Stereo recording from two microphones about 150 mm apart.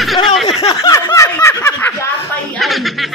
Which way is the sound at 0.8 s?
25° left (ahead or behind).